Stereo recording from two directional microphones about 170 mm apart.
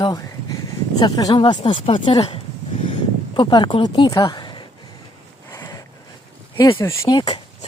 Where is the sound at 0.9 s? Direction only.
25° left (ahead or behind).